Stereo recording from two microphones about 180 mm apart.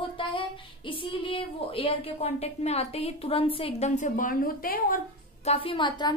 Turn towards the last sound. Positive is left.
turn(degrees=25)  # may be behind; listen again after turning